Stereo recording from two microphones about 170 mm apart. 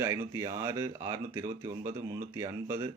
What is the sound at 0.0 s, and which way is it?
A man's voice, 15° right (ahead or behind).